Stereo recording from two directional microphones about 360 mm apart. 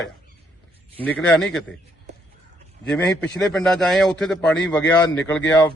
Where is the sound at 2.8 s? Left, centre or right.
Centre.